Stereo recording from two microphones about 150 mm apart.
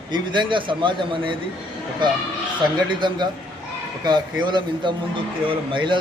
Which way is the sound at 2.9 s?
30° right (ahead or behind).